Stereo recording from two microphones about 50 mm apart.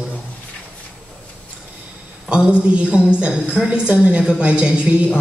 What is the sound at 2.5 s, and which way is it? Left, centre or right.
A woman's voice, right.